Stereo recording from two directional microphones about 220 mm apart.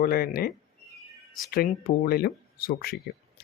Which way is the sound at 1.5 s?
40° left (ahead or behind).